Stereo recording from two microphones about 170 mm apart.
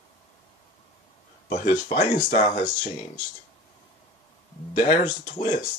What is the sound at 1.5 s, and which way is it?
Speech, 45° left (ahead or behind).